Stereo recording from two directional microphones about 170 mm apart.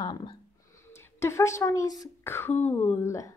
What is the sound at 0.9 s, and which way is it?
A woman's voice, 15° left (ahead or behind).